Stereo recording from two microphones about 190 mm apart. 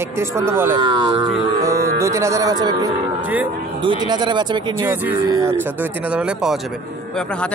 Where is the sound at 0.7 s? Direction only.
25° right (ahead or behind).